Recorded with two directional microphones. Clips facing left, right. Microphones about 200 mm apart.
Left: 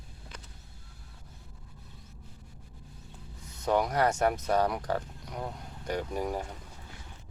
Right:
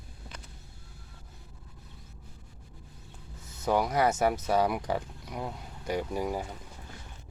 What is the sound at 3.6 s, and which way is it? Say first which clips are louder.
Speech: even; 5° right (ahead or behind).